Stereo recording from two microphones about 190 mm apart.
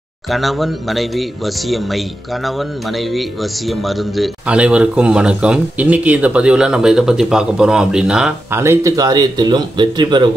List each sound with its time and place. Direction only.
0.3 s speech: centre (ahead or behind); by 10.3 s 25° right (ahead or behind)